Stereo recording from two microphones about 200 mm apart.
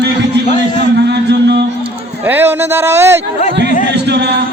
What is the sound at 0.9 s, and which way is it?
Music, 55° right (ahead or behind).